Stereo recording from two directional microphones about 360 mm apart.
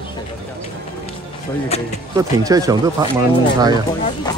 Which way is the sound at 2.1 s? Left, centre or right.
Centre.